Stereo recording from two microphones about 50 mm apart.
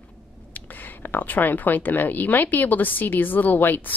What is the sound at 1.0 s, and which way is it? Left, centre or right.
A woman's voice, left.